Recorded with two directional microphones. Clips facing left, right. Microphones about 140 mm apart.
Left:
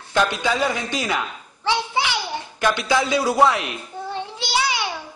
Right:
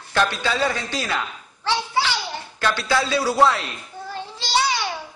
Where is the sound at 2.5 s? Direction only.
15° left (ahead or behind).